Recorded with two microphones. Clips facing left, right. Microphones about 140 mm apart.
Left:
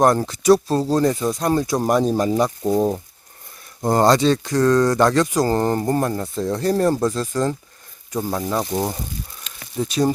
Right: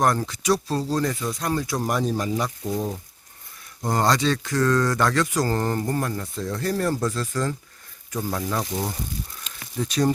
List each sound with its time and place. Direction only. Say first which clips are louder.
0.0 s speech: left 6 dB; 30° left (ahead or behind)
0.5 s speech: left 7 dB; 45° left (ahead or behind)
1.0 s speech: left 7 dB; 30° left (ahead or behind); by 2.9 s 45° left (ahead or behind)
3.8 s speech: left 6 dB; 30° left (ahead or behind)
8.7 s speech: left 6 dB; 40° left (ahead or behind)